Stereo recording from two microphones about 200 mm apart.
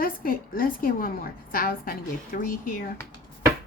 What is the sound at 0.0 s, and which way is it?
A woman's voice, 45° left (ahead or behind).